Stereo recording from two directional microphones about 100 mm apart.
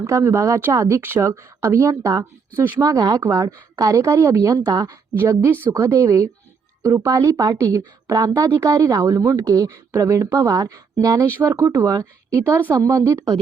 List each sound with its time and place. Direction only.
0.2 s speech: 20° right (ahead or behind)
5.1 s speech: 25° right (ahead or behind)